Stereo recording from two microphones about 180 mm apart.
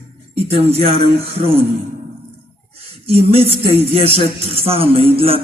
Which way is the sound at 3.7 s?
35° right (ahead or behind).